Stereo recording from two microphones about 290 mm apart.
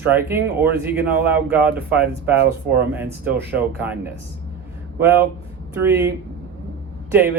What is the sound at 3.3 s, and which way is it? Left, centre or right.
Speech, centre.